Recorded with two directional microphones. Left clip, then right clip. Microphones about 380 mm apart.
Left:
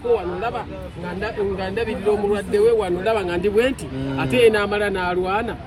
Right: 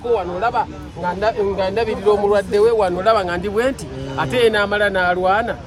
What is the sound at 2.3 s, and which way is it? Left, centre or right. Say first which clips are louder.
Speech: right 3 dB; centre.